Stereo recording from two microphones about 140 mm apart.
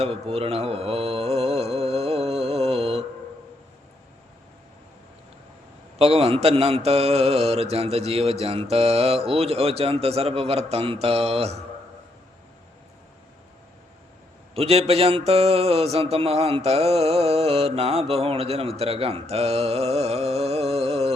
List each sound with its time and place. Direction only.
0.0 s mantra: 45° right (ahead or behind)
6.0 s mantra: 45° right (ahead or behind)
14.5 s mantra: 45° right (ahead or behind)